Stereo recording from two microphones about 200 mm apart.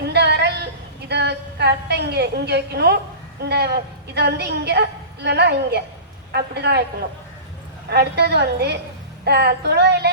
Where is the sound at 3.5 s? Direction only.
55° right (ahead or behind).